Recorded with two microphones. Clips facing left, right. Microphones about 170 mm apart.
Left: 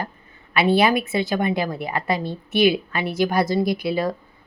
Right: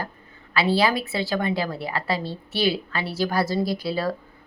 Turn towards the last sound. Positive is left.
turn(degrees=15)  # may be behind; listen again after turning